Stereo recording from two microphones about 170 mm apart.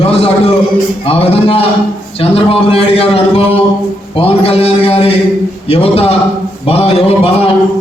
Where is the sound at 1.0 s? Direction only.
35° left (ahead or behind).